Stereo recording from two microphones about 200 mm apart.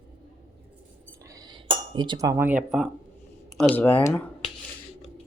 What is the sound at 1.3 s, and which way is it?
Cutlery, 20° right (ahead or behind).